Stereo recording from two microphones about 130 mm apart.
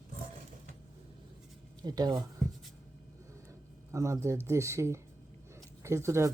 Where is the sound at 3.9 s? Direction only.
20° right (ahead or behind).